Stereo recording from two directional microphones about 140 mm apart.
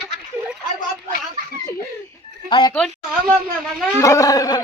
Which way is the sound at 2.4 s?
35° left (ahead or behind).